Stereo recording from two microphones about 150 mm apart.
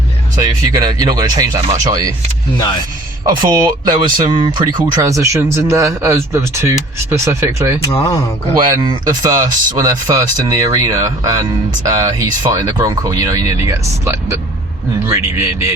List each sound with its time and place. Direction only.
0.4 s speech: 25° right (ahead or behind)
3.2 s a man's voice: 25° right (ahead or behind)